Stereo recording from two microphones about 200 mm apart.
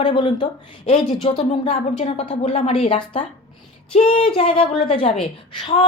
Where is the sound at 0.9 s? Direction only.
35° left (ahead or behind).